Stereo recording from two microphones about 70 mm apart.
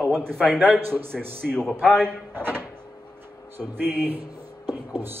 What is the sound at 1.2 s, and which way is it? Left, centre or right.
Speech, right.